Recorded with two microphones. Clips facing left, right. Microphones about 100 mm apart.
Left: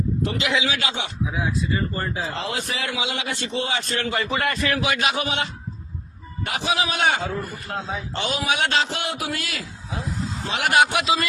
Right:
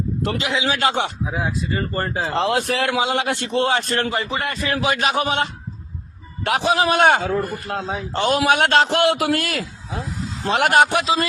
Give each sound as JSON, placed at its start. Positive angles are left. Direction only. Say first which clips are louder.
{"t": 0.3, "sound": "speech", "louder": "even", "side_deg": -35}
{"t": 0.7, "sound": "speech", "louder": "right 7 dB", "side_deg": -50}
{"t": 4.1, "sound": "speech", "louder": "even", "side_deg": -25}
{"t": 4.7, "sound": "speech", "louder": "right 3 dB", "side_deg": -40}
{"t": 6.4, "sound": "speech", "louder": "right 6 dB", "side_deg": -65}
{"t": 8.1, "sound": "a man's voice", "louder": "right 9 dB", "side_deg": -45}
{"t": 8.4, "sound": "a man's voice", "louder": "right 6 dB", "side_deg": -60}